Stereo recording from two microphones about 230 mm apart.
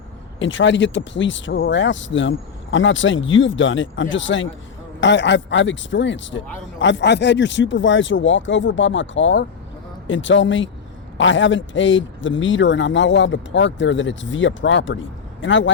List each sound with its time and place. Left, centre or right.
0.3 s speech: left